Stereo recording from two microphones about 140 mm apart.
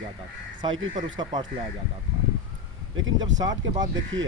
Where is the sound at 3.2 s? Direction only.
30° right (ahead or behind).